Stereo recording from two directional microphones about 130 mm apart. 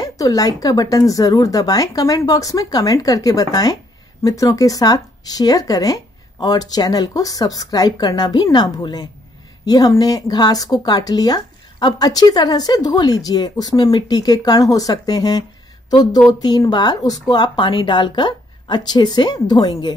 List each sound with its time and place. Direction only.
0.0 s speech: 25° left (ahead or behind)